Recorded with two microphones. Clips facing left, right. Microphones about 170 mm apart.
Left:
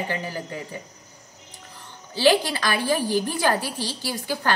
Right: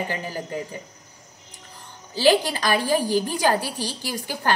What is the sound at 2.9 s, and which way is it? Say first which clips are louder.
A woman's voice: right 1 dB; 15° right (ahead or behind).